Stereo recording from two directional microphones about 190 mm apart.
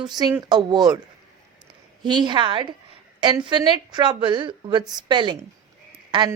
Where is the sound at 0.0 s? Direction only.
20° right (ahead or behind).